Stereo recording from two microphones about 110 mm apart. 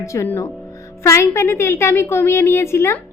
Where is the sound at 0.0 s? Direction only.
25° left (ahead or behind).